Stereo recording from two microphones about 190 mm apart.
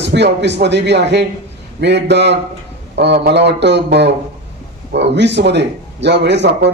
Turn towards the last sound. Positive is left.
turn(degrees=-65)  # may be behind; listen again after turning